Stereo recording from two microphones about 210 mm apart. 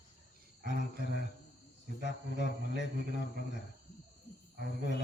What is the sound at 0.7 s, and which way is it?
Speech, 55° left (ahead or behind).